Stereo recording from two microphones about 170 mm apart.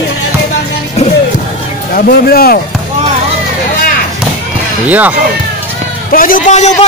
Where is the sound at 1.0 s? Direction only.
40° left (ahead or behind).